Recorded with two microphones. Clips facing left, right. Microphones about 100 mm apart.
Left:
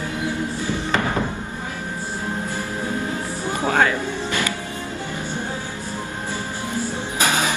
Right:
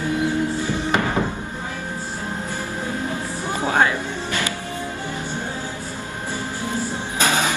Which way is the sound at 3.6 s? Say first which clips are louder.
Even; 15° right (ahead or behind).